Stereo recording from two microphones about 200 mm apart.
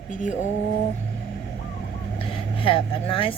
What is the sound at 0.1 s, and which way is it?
Mantra, 40° left (ahead or behind).